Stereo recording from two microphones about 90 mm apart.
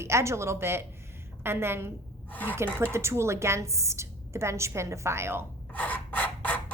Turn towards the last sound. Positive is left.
turn(degrees=20)  # may be behind; listen again after turning